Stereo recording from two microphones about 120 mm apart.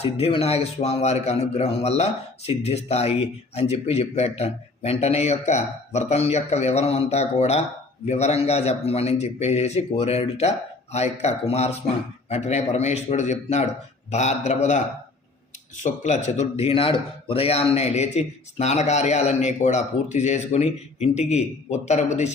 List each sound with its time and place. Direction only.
0.0 s a man's voice: 55° left (ahead or behind); by 22.3 s 70° left (ahead or behind)